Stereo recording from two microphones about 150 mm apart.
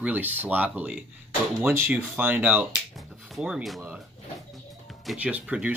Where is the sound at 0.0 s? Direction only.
10° right (ahead or behind).